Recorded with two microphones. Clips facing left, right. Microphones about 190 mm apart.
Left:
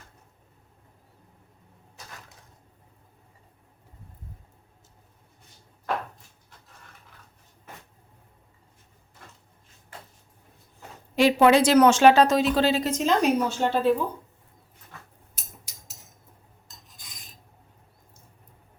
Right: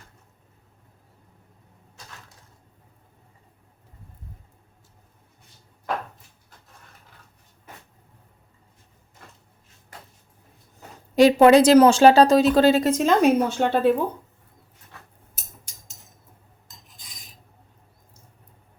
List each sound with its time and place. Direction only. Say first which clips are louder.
11.1 s speech: right 5 dB; 40° right (ahead or behind); by 13.9 s 60° right (ahead or behind)